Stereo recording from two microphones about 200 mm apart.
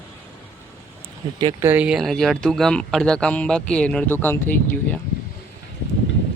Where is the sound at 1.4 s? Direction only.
20° right (ahead or behind).